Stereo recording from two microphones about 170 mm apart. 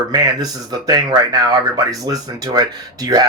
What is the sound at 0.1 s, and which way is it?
Speech, 25° right (ahead or behind).